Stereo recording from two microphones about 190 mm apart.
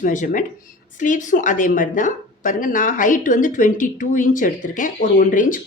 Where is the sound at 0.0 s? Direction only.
45° left (ahead or behind).